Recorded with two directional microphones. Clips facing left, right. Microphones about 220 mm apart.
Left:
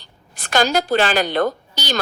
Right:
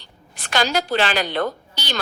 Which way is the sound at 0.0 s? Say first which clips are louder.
Even; 45° left (ahead or behind).